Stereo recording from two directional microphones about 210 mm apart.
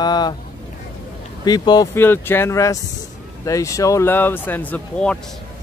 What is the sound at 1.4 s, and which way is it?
Speech, 20° left (ahead or behind).